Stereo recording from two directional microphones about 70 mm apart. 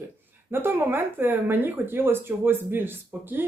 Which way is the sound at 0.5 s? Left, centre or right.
Right.